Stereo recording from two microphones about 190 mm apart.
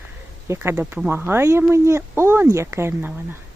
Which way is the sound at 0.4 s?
15° right (ahead or behind).